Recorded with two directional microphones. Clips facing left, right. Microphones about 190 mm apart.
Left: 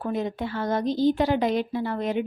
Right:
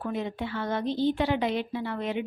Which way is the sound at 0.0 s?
40° left (ahead or behind).